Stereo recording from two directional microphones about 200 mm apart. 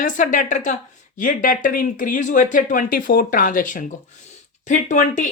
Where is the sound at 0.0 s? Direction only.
40° left (ahead or behind).